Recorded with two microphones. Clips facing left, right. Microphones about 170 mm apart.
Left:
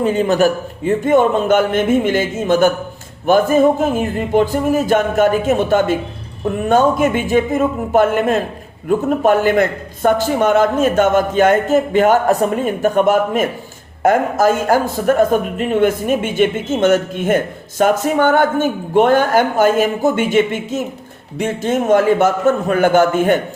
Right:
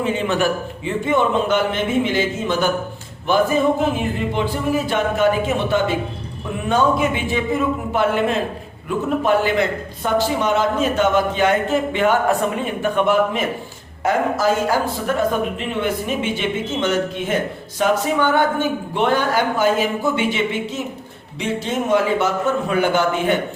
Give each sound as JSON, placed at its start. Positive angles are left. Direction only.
{"t": 0.0, "sound": "a man's voice", "side_deg": 40}